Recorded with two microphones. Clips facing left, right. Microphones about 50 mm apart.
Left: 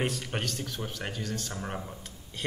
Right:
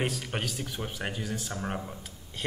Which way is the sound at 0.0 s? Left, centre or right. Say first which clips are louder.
Even; centre.